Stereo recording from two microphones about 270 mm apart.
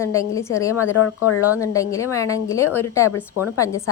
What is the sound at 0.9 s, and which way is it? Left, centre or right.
Speech, left.